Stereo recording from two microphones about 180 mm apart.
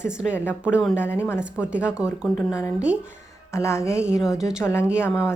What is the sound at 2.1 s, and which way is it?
Speech, 15° left (ahead or behind).